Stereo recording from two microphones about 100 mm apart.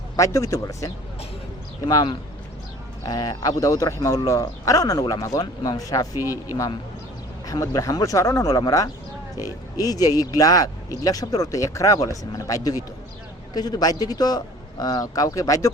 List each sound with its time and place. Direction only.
0.2 s speech: 30° left (ahead or behind)
7.4 s speech: 35° left (ahead or behind)